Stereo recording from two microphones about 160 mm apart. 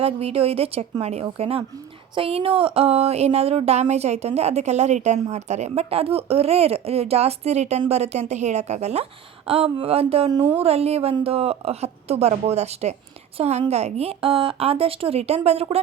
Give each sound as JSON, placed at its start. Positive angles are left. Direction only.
{"t": 0.0, "sound": "speech", "side_deg": -40}